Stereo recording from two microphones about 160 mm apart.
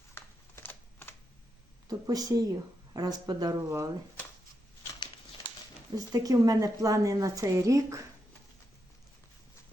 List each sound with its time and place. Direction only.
0.1 s shuffling cards: 15° left (ahead or behind)
1.9 s a woman's voice: 25° right (ahead or behind)
6.1 s a woman's voice: 20° right (ahead or behind)